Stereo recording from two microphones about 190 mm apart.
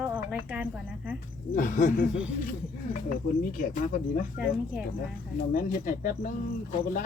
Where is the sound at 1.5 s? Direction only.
40° left (ahead or behind).